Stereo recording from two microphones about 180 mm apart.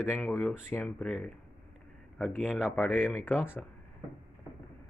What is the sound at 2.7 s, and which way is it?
Speech, 10° left (ahead or behind).